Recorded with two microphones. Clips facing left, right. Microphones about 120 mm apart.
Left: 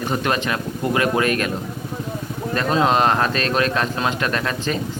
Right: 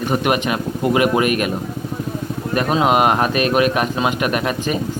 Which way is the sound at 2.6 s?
10° right (ahead or behind).